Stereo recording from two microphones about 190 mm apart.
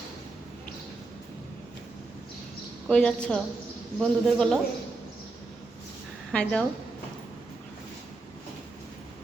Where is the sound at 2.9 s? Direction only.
5° left (ahead or behind).